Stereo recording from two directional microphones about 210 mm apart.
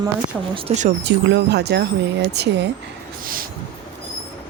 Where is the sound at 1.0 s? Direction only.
55° right (ahead or behind).